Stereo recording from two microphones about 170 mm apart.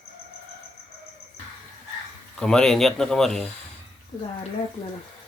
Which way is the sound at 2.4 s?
5° left (ahead or behind).